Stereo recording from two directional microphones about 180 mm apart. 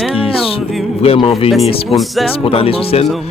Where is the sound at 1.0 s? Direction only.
30° left (ahead or behind).